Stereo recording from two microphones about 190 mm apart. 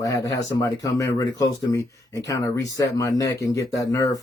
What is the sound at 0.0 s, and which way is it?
Speech, 20° left (ahead or behind).